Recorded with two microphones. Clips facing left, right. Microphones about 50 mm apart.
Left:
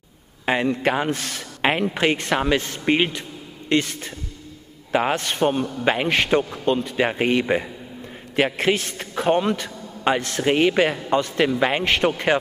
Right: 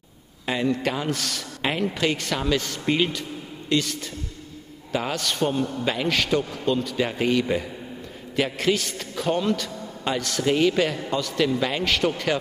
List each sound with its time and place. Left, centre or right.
0.5 s a man's voice: left